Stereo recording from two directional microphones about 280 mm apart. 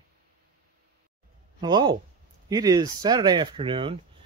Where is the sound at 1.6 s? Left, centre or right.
Centre.